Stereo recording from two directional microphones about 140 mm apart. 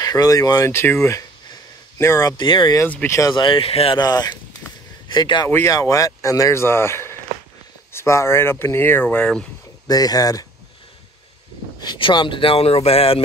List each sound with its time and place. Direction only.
0.0 s speech: 25° left (ahead or behind)
1.0 s a sound: 20° left (ahead or behind)
2.3 s speech: 35° left (ahead or behind)
2.8 s speech: 15° left (ahead or behind)
3.4 s speech: 40° left (ahead or behind)
4.0 s speech: 30° left (ahead or behind)
5.5 s speech: 20° left (ahead or behind)
9.8 s speech: 25° left (ahead or behind)
11.8 s speech: 35° left (ahead or behind)